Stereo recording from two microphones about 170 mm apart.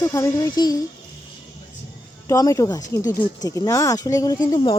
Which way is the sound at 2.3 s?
20° left (ahead or behind).